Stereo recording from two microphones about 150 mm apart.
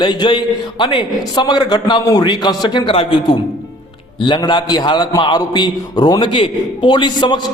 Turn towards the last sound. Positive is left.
turn(degrees=30)  # may be behind; listen again after turning